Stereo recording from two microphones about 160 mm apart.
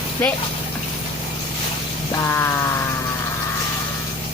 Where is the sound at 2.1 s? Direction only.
20° left (ahead or behind).